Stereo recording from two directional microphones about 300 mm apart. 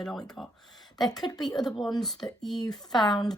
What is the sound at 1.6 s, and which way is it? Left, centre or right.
Speech, centre.